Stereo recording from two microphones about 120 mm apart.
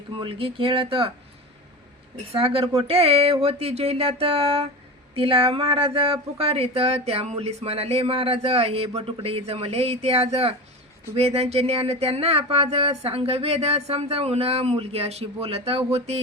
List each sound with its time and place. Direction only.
0.2 s speech: 50° right (ahead or behind)
2.3 s speech: 50° right (ahead or behind)